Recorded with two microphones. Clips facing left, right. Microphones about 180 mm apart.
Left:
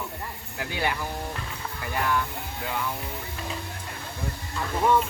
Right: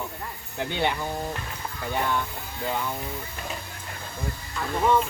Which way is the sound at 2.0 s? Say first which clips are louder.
Left 1 dB; 25° right (ahead or behind).